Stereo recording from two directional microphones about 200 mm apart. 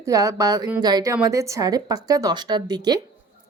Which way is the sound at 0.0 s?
15° right (ahead or behind).